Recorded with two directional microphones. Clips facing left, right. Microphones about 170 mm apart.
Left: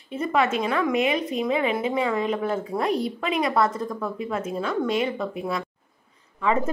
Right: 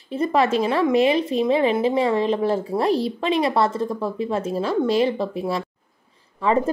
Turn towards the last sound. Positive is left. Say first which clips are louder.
# right 4 dB
turn(degrees=-35)  # may be behind; listen again after turning